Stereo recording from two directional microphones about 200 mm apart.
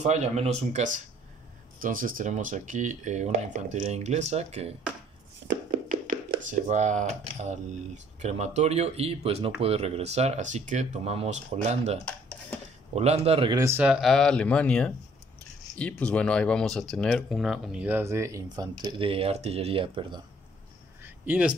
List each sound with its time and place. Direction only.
0.0 s speech: 35° right (ahead or behind)
13.6 s speech: 10° right (ahead or behind)
21.0 s a sound: 5° right (ahead or behind)